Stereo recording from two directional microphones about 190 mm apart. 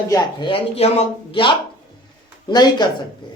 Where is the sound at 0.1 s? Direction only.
25° left (ahead or behind).